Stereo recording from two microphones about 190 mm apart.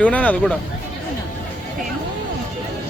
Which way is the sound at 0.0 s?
5° left (ahead or behind).